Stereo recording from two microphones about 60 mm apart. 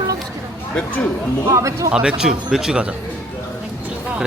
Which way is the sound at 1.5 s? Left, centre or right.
Right.